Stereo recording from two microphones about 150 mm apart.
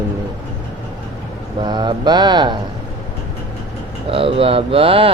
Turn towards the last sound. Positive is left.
turn(degrees=-35)  # may be behind; listen again after turning